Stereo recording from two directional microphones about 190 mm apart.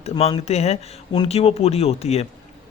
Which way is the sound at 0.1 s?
30° left (ahead or behind).